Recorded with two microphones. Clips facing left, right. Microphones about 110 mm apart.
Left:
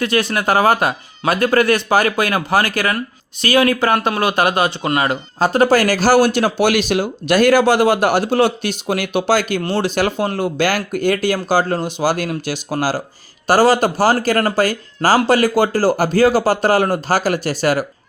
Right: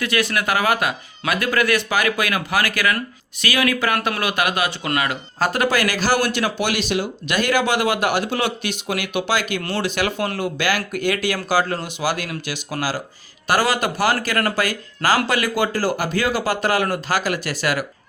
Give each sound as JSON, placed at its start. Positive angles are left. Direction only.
{"t": 0.0, "sound": "speech", "side_deg": 30}